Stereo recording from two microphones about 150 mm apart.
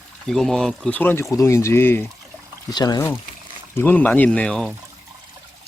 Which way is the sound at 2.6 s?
25° left (ahead or behind).